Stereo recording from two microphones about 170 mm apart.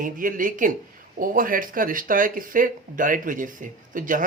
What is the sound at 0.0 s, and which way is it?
Speech, 55° right (ahead or behind).